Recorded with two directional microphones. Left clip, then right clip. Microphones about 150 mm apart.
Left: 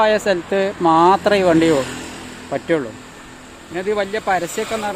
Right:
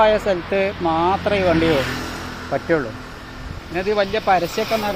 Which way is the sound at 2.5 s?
40° left (ahead or behind).